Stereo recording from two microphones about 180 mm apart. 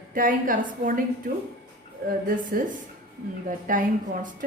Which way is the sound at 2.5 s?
50° right (ahead or behind).